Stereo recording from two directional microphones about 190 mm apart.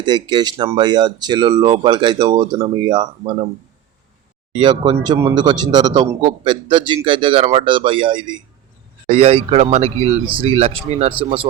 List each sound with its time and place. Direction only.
0.0 s speech: 25° right (ahead or behind)
4.5 s speech: 25° right (ahead or behind)